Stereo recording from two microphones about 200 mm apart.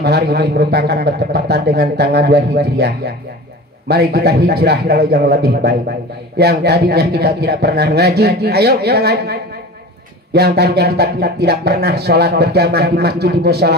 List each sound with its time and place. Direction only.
0.0 s speech: 55° right (ahead or behind)
3.9 s speech: 55° right (ahead or behind)